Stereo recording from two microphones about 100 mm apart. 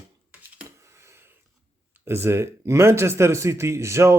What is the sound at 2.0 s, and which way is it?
Speech, 25° right (ahead or behind).